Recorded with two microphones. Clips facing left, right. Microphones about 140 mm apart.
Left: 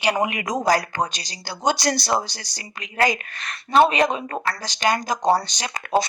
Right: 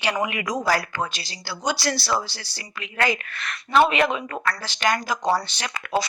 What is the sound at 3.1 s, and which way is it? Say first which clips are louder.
A woman's voice: right 1 dB; 35° left (ahead or behind).